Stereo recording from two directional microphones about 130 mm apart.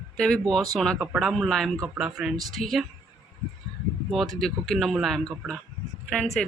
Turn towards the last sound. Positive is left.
turn(degrees=5)  # may be behind; listen again after turning